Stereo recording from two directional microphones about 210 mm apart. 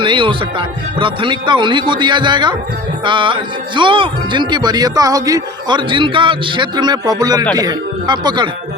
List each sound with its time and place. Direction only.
0.0 s speech: 25° right (ahead or behind)